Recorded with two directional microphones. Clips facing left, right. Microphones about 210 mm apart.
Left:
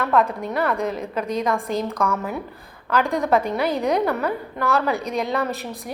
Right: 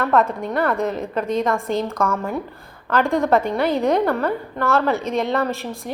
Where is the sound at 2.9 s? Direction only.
Centre (ahead or behind).